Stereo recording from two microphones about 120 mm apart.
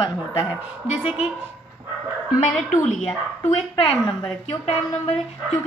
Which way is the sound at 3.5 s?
45° left (ahead or behind).